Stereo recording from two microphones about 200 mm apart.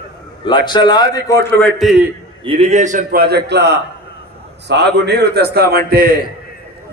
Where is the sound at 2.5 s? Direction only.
30° right (ahead or behind); by 6.1 s 50° right (ahead or behind).